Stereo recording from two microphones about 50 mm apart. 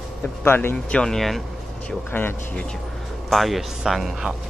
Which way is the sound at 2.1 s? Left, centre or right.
Left.